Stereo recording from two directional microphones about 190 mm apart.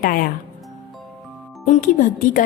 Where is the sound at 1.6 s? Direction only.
40° left (ahead or behind).